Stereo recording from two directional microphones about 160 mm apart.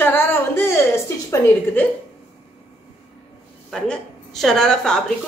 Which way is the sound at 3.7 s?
5° left (ahead or behind).